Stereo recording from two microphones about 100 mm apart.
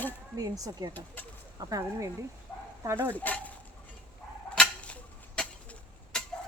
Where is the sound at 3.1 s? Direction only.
15° left (ahead or behind).